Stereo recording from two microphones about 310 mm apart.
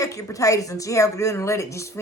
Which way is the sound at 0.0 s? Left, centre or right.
Centre.